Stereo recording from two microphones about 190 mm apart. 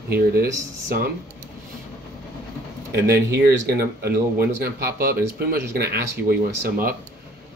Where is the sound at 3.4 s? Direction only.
60° right (ahead or behind).